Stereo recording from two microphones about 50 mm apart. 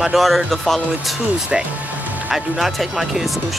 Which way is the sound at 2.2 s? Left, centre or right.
Centre.